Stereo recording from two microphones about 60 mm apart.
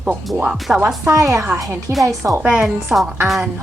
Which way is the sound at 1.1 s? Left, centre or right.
Right.